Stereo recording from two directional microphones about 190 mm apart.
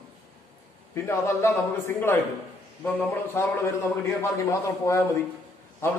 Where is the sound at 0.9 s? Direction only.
15° left (ahead or behind).